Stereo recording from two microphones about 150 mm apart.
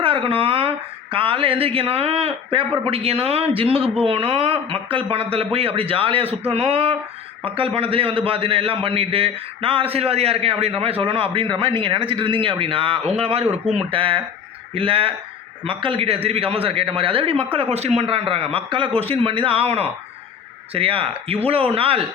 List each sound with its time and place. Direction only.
0.0 s a man's voice: 35° right (ahead or behind)